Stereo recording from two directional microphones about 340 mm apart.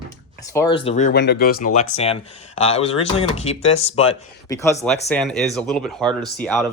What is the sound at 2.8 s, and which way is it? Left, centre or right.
Speech, centre.